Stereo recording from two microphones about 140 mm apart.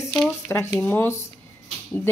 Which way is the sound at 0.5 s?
15° left (ahead or behind).